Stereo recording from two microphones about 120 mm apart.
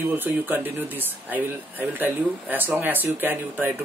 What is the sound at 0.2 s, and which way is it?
Speech, 15° right (ahead or behind).